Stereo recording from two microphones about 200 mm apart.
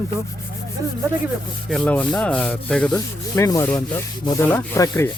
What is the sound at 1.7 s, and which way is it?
Rub, 5° left (ahead or behind).